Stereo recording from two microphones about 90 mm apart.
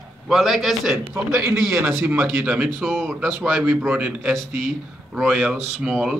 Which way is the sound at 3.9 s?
10° right (ahead or behind).